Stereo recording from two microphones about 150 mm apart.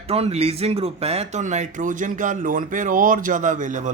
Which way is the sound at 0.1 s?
45° right (ahead or behind).